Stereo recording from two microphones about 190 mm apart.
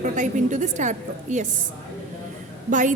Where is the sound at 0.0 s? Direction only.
40° right (ahead or behind).